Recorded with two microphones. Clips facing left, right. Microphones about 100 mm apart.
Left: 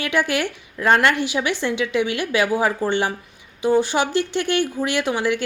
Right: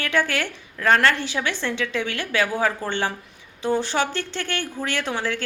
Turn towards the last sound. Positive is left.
turn(degrees=15)  # may be behind; listen again after turning